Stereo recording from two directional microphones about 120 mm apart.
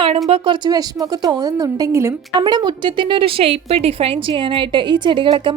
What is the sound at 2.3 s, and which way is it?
A woman's voice, 35° right (ahead or behind).